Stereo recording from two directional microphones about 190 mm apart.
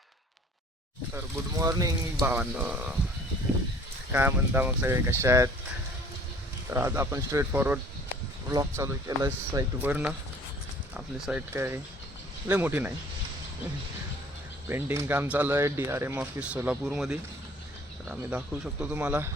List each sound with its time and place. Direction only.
1.1 s speech: 15° right (ahead or behind)
4.1 s speech: 10° right (ahead or behind)
6.7 s speech: 15° right (ahead or behind)
14.7 s speech: 10° right (ahead or behind)